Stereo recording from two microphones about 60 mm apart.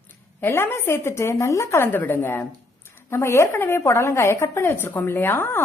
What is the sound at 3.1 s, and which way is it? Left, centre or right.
A woman's voice, left.